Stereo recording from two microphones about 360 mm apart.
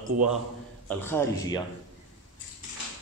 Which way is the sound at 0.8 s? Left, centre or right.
Centre.